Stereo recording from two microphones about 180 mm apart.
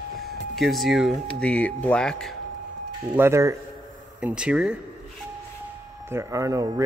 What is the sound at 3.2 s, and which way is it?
A man's voice, 15° right (ahead or behind).